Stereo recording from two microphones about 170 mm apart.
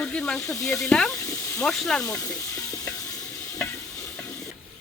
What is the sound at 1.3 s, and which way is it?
Snake, 15° left (ahead or behind).